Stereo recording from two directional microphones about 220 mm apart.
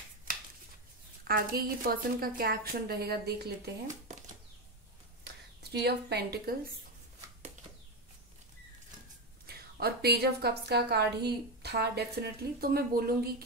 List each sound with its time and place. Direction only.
1.2 s a woman's voice: 45° right (ahead or behind)
5.2 s a sound: 50° right (ahead or behind)
9.5 s a woman's voice: 45° right (ahead or behind)